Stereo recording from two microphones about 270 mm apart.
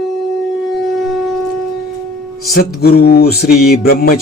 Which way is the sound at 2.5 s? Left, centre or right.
Left.